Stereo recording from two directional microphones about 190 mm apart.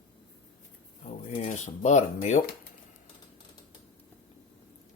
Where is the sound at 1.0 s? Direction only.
35° left (ahead or behind).